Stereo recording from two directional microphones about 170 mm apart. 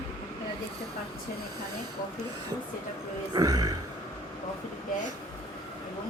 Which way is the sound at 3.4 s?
20° right (ahead or behind).